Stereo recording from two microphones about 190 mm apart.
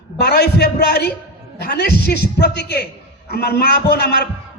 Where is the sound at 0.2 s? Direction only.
60° left (ahead or behind).